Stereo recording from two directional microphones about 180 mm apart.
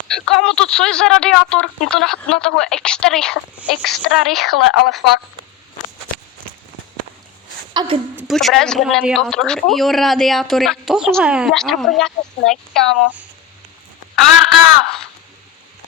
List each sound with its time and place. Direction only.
0.1 s speech: 5° left (ahead or behind)
7.7 s a woman's voice: 25° right (ahead or behind)
8.3 s speech: centre (ahead or behind)